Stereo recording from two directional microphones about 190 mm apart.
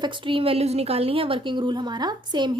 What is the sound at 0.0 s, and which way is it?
A woman's voice, 25° right (ahead or behind).